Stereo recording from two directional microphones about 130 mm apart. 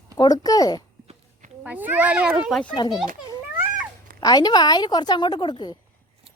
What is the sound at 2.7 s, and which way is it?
Speech, 35° left (ahead or behind).